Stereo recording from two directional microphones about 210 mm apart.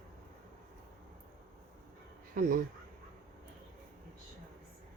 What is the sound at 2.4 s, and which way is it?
Speech, 45° right (ahead or behind).